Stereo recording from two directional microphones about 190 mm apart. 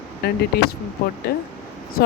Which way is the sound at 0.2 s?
55° left (ahead or behind).